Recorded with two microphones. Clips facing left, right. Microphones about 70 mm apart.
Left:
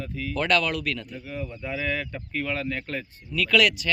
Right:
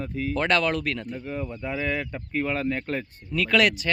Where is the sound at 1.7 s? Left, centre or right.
Right.